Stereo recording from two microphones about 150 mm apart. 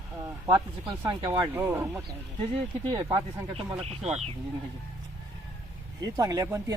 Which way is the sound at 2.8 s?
35° right (ahead or behind).